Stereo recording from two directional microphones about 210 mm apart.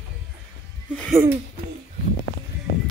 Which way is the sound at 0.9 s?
Centre (ahead or behind).